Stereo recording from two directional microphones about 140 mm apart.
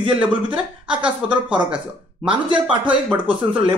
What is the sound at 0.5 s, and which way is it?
Speech, 35° right (ahead or behind).